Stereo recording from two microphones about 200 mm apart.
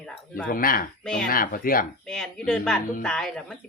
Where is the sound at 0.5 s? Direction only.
45° left (ahead or behind).